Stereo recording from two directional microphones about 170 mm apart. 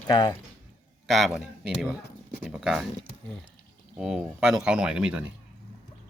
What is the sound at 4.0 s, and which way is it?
Speech, 5° right (ahead or behind).